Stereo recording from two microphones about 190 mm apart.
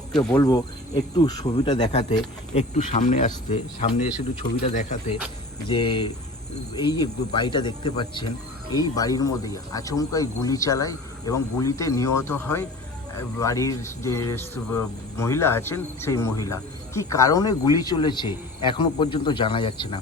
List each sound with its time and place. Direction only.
0.1 s speech: 5° left (ahead or behind)
0.4 s a man's voice: 25° left (ahead or behind)
1.9 s speech: 35° left (ahead or behind)
5.6 s a man's voice: 25° left (ahead or behind)